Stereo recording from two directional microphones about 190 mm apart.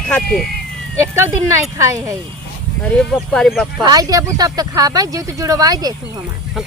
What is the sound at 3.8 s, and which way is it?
Speech, 20° right (ahead or behind).